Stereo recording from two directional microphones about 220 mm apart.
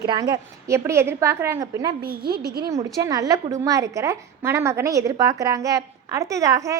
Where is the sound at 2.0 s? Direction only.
45° right (ahead or behind).